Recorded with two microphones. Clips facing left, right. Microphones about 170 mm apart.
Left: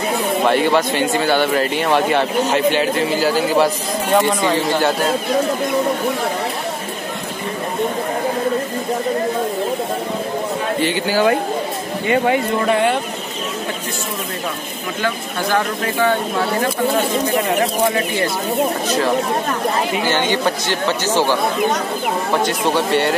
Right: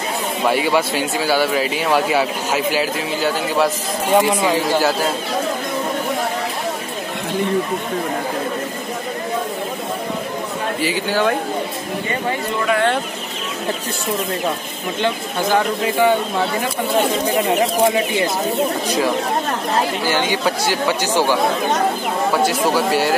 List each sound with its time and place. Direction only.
0.5 s a man's voice: 5° right (ahead or behind)
10.8 s a man's voice: centre (ahead or behind)
15.0 s speech: 20° right (ahead or behind)
17.9 s speech: 15° right (ahead or behind)
20.1 s speech: 10° right (ahead or behind)
22.7 s a man's voice: 5° right (ahead or behind)